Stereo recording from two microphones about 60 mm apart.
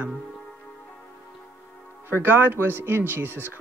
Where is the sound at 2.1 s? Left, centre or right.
Right.